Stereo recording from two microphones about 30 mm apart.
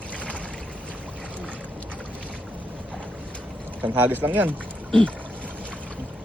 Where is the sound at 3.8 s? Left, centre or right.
Right.